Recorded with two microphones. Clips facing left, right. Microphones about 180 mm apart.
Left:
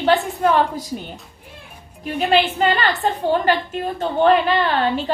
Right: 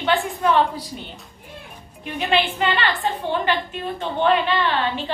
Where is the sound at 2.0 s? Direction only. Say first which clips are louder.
Left 4 dB; 40° left (ahead or behind).